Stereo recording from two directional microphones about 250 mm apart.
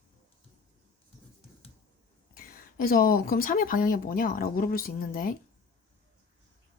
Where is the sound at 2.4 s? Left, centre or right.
Left.